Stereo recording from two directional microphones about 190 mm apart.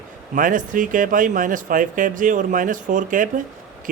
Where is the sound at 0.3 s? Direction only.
45° right (ahead or behind).